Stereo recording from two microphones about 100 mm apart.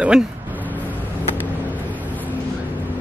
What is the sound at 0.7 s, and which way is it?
Vehicle, 15° left (ahead or behind).